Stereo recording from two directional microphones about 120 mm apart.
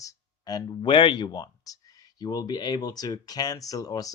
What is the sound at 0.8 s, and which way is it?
Speech, 45° left (ahead or behind).